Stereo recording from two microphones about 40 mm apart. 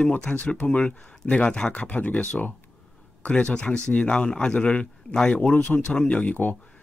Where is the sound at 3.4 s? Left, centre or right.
Left.